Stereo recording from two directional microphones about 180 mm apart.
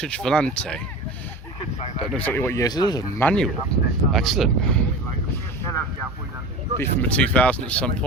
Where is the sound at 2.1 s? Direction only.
10° left (ahead or behind).